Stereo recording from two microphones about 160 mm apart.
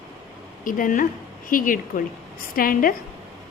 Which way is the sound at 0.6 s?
60° left (ahead or behind).